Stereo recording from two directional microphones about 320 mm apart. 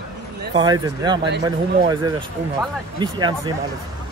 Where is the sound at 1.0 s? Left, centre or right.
Centre.